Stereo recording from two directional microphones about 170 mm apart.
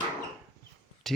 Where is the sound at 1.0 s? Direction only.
Centre (ahead or behind).